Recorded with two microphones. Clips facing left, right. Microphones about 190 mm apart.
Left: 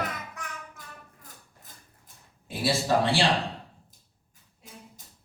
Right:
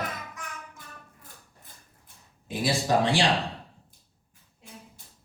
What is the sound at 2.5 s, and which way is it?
Speech, 15° right (ahead or behind).